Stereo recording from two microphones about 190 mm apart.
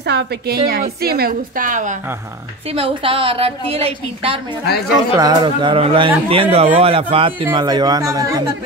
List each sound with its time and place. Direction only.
0.0 s a woman's voice: 60° right (ahead or behind); by 2.0 s 40° right (ahead or behind)
2.7 s a man's voice: 30° right (ahead or behind)
4.6 s speech: 55° left (ahead or behind)
5.1 s a man's voice: 20° right (ahead or behind)